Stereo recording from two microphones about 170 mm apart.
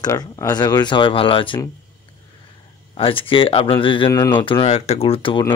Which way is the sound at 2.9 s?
30° left (ahead or behind).